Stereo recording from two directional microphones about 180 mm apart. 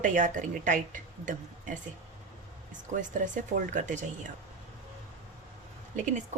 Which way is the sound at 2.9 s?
45° right (ahead or behind).